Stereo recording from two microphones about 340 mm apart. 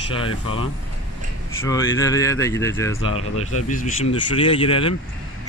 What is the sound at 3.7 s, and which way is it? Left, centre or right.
Speech, centre.